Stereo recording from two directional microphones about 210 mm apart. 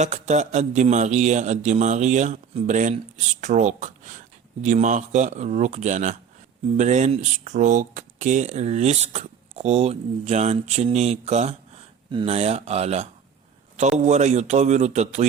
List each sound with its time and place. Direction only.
0.0 s speech: 35° right (ahead or behind)